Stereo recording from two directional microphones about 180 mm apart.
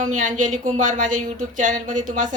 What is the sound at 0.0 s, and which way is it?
Speech, 45° right (ahead or behind).